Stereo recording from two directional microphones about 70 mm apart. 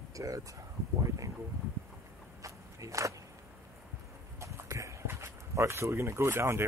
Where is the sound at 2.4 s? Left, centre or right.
Right.